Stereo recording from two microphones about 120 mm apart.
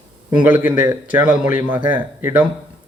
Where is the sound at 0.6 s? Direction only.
15° right (ahead or behind).